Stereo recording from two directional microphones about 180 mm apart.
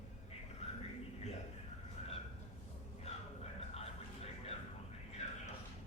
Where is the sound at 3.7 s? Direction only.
35° left (ahead or behind).